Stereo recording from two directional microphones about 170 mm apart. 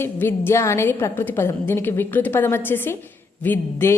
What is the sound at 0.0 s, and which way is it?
A woman's voice, 15° left (ahead or behind).